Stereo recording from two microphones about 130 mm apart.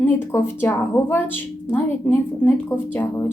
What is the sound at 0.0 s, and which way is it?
A woman's voice, 15° left (ahead or behind).